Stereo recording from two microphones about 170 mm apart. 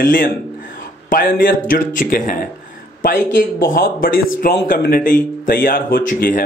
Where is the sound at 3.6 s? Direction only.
55° left (ahead or behind).